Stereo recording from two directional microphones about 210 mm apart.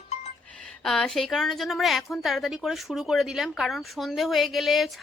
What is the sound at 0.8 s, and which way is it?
A woman's voice, centre (ahead or behind).